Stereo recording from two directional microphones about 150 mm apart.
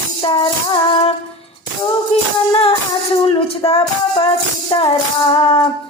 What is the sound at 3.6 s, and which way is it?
Speech, 40° left (ahead or behind).